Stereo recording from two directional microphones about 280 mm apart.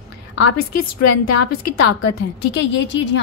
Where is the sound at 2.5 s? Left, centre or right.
Left.